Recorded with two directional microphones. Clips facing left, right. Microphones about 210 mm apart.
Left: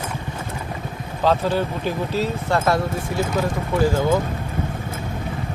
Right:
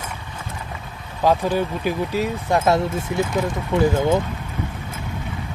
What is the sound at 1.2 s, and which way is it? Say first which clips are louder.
Speech: right 1 dB; 15° right (ahead or behind).